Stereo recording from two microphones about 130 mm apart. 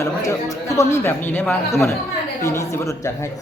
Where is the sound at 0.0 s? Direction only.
25° left (ahead or behind).